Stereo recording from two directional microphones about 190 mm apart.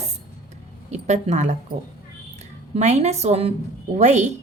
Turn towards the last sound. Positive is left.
turn(degrees=-35)  # may be behind; listen again after turning